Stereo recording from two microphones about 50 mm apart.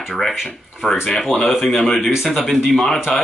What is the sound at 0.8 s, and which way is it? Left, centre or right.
Speech, centre.